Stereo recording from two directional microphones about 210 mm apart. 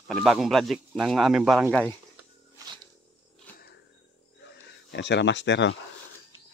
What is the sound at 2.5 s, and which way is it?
Dog, 20° right (ahead or behind).